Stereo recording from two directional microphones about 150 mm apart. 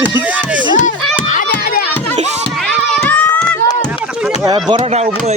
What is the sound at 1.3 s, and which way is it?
Run, 60° left (ahead or behind).